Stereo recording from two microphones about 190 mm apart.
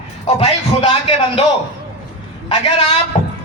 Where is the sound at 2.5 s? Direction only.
30° left (ahead or behind).